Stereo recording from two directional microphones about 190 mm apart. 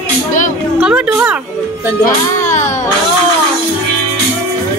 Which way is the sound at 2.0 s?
40° left (ahead or behind).